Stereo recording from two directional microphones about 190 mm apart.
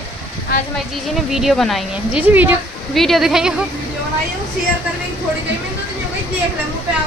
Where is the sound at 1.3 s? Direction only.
Centre (ahead or behind).